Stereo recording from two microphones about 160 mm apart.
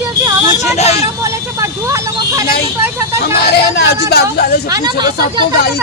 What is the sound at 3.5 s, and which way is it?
Speech, 90° left.